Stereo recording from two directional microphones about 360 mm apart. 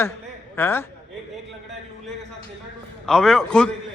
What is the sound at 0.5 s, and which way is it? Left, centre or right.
Speech, centre.